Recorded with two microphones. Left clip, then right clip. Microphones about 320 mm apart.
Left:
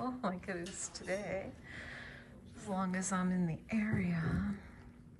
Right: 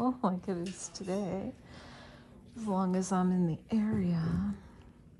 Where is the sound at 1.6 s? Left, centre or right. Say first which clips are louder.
Left 4 dB; centre.